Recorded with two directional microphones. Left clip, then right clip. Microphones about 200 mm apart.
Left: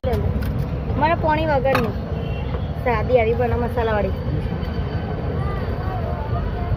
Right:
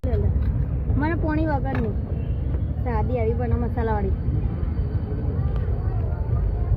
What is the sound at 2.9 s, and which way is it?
Speech, 50° right (ahead or behind).